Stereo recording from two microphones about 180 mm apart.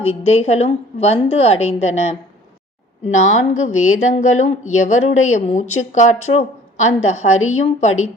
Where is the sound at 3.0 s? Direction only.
40° left (ahead or behind).